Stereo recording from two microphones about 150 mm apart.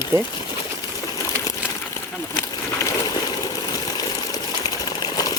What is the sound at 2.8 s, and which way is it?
Water, 20° left (ahead or behind).